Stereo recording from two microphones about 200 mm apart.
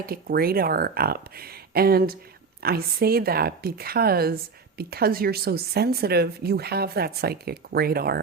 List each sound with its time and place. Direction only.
0.0 s speech: 50° right (ahead or behind)